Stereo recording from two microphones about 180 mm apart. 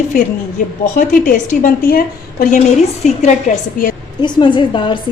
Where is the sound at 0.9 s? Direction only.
45° left (ahead or behind).